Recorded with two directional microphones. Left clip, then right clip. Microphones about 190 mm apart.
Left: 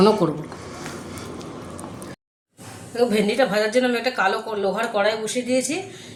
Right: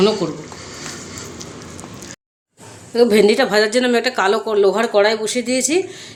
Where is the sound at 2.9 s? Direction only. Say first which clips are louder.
Right 7 dB; 65° right (ahead or behind).